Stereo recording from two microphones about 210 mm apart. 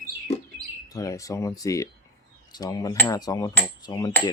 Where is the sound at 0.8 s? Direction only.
15° left (ahead or behind).